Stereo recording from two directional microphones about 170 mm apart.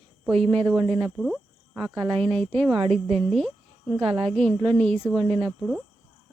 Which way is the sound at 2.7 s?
35° right (ahead or behind).